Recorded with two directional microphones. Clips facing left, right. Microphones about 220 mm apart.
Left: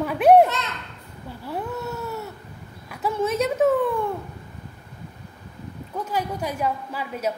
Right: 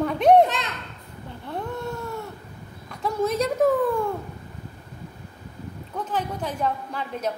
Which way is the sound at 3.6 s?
Centre (ahead or behind).